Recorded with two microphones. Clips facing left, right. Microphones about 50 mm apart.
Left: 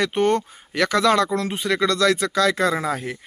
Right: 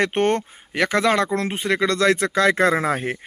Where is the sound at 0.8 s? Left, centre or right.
Right.